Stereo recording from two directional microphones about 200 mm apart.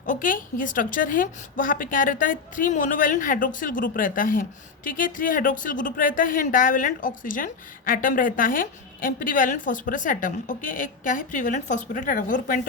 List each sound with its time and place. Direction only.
0.0 s a woman's voice: 40° left (ahead or behind)